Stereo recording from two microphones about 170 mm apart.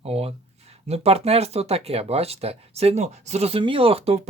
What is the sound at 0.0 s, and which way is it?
Speech, 35° right (ahead or behind).